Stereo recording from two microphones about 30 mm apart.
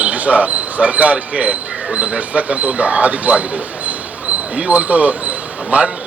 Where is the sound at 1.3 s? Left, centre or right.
Right.